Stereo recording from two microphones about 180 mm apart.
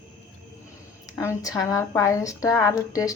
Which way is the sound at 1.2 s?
15° left (ahead or behind).